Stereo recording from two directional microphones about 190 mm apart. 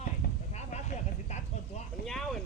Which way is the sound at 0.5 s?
35° left (ahead or behind).